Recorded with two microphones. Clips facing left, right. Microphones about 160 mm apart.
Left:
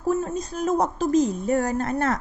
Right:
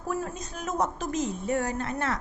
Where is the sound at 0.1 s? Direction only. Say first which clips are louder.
Left 8 dB; 25° left (ahead or behind).